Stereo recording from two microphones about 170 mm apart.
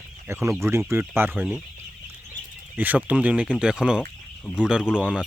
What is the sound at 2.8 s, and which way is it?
Speech, 10° right (ahead or behind).